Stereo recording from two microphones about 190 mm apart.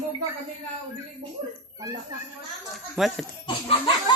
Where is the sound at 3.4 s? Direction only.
30° left (ahead or behind).